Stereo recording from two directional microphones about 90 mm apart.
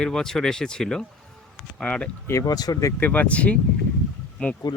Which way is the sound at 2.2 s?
35° left (ahead or behind).